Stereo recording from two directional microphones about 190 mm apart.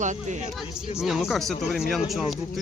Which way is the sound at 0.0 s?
40° right (ahead or behind).